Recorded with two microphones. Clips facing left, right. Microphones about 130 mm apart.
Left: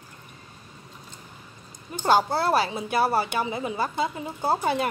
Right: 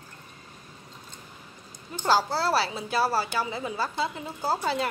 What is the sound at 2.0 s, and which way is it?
A woman's voice, 20° left (ahead or behind).